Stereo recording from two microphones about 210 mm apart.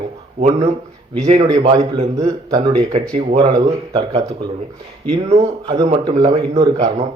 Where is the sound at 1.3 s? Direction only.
30° right (ahead or behind).